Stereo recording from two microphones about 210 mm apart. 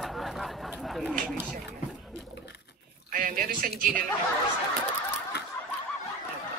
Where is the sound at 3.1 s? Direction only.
40° right (ahead or behind).